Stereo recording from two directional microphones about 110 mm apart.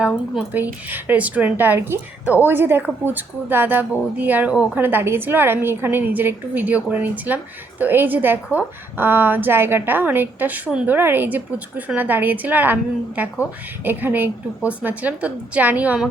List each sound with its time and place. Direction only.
0.3 s a woman's voice: 15° right (ahead or behind)